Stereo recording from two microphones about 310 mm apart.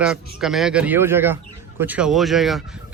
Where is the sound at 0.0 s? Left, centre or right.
Centre.